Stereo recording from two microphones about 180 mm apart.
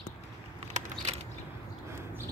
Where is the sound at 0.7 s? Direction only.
45° right (ahead or behind).